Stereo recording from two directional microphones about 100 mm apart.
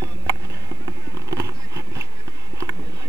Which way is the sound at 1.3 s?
35° right (ahead or behind).